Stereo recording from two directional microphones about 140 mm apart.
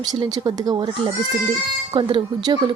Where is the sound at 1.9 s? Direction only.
35° right (ahead or behind).